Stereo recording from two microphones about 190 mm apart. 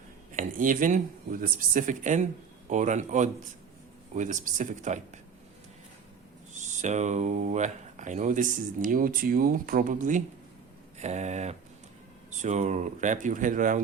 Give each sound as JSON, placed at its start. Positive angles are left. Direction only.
{"t": 0.3, "sound": "speech", "side_deg": -45}
{"t": 6.5, "sound": "speech", "side_deg": -40}